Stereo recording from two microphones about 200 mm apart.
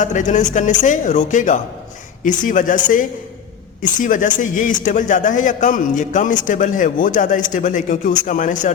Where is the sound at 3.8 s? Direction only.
40° left (ahead or behind).